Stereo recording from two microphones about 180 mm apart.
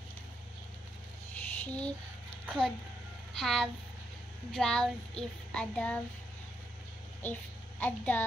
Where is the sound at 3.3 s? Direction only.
Centre (ahead or behind).